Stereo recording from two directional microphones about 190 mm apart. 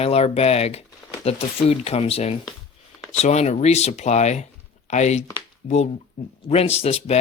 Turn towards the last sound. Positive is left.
turn(degrees=30)  # may be behind; listen again after turning